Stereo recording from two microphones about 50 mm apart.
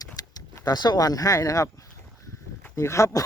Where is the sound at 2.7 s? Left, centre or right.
Left.